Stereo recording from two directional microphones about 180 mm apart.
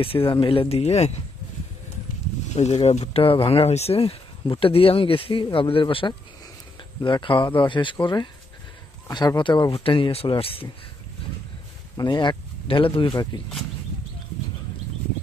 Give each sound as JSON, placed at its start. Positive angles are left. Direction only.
{"t": 0.0, "sound": "speech", "side_deg": 30}
{"t": 2.5, "sound": "speech", "side_deg": 40}
{"t": 12.0, "sound": "speech", "side_deg": 25}